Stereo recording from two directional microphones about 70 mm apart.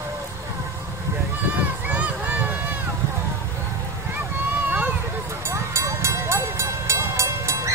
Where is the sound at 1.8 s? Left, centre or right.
Right.